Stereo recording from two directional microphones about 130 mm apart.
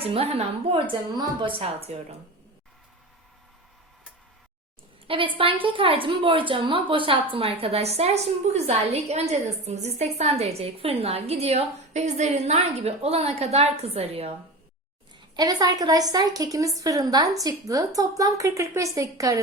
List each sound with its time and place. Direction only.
0.0 s a woman's voice: 50° right (ahead or behind)
1.1 s a woman's voice: 35° right (ahead or behind)
5.0 s a woman's voice: 40° right (ahead or behind)
15.4 s a woman's voice: 30° right (ahead or behind)